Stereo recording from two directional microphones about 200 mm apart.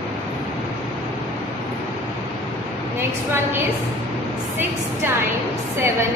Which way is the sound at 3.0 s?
10° right (ahead or behind).